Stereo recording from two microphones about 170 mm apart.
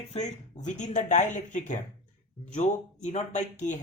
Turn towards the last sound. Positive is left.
turn(degrees=45)  # may be behind; listen again after turning